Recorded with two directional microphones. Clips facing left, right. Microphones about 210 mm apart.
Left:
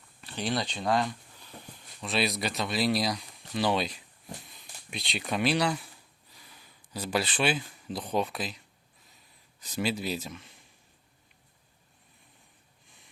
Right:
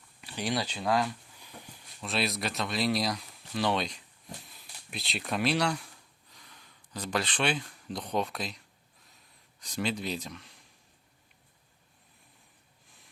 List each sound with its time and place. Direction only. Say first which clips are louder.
0.2 s speech: left 1 dB; 10° right (ahead or behind)